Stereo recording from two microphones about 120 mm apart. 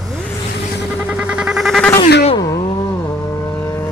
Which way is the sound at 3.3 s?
25° left (ahead or behind).